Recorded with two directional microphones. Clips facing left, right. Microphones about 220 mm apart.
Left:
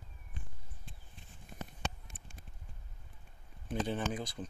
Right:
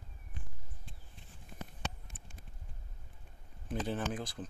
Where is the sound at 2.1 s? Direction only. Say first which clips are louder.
Even; 50° right (ahead or behind).